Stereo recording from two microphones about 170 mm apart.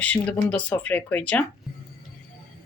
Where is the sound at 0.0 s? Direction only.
10° left (ahead or behind).